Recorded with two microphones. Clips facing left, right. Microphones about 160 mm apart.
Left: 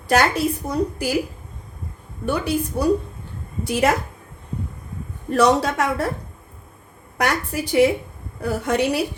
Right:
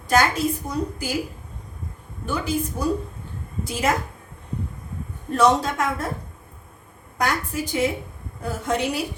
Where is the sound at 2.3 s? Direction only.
70° left (ahead or behind).